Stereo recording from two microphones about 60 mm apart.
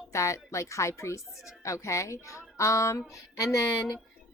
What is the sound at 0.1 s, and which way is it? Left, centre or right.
A woman's voice, left.